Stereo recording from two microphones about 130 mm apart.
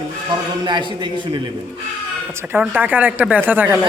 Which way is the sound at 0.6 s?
35° right (ahead or behind).